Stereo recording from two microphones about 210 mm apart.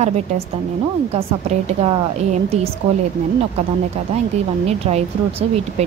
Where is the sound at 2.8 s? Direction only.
30° right (ahead or behind).